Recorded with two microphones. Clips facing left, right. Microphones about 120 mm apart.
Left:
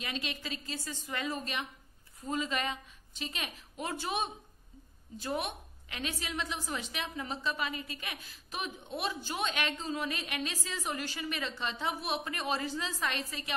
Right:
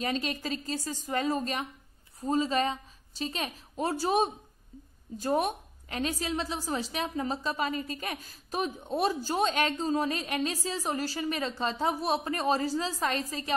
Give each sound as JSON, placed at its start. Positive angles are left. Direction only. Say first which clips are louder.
{"t": 0.0, "sound": "a woman's voice", "louder": "right 8 dB", "side_deg": -40}